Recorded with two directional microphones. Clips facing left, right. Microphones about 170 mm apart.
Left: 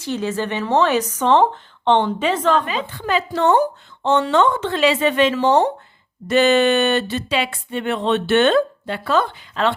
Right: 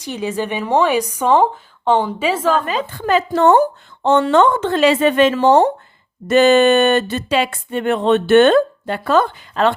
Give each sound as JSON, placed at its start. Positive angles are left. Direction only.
{"t": 0.0, "sound": "speech", "side_deg": -15}
{"t": 2.6, "sound": "speech", "side_deg": -45}